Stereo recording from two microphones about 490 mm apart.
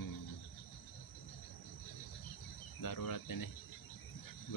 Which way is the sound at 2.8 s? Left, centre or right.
Left.